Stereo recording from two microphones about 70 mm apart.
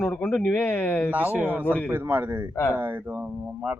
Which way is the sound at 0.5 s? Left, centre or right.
Left.